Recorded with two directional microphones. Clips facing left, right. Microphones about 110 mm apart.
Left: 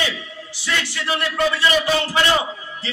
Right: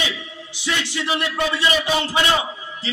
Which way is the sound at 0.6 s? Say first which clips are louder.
Right 1 dB; 20° right (ahead or behind).